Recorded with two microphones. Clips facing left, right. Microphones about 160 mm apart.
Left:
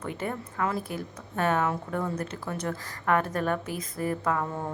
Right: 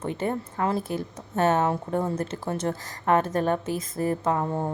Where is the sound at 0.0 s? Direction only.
30° right (ahead or behind).